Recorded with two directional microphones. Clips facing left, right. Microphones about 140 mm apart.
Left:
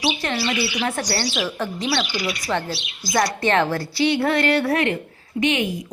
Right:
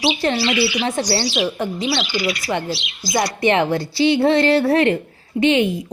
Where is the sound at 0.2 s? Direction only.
30° right (ahead or behind).